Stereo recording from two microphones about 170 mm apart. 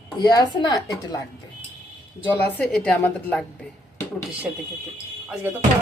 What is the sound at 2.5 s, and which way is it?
A woman's voice, 5° left (ahead or behind).